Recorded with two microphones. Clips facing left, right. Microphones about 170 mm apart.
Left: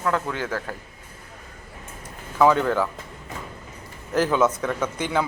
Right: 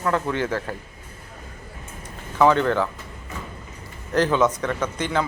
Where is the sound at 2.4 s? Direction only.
5° left (ahead or behind).